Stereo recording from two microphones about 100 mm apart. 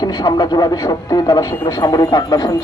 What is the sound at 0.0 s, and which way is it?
Speech, 45° left (ahead or behind).